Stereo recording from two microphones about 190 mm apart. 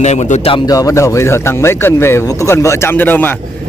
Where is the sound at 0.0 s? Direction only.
35° left (ahead or behind).